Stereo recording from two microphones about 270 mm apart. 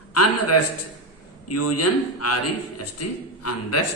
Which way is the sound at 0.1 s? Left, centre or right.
Left.